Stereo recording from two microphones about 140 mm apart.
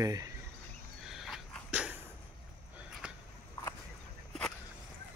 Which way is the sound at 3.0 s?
5° right (ahead or behind).